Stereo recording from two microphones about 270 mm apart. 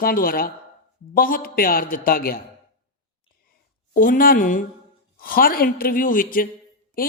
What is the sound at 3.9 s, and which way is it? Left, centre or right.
A woman's voice, left.